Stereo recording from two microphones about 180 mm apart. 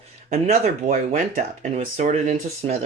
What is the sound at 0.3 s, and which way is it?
Speech, 35° right (ahead or behind).